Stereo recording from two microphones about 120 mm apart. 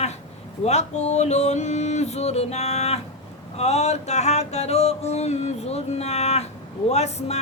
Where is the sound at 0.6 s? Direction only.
65° left (ahead or behind).